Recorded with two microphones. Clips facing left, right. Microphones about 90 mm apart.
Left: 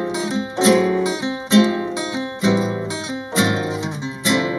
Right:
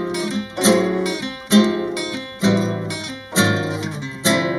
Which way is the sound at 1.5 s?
25° right (ahead or behind).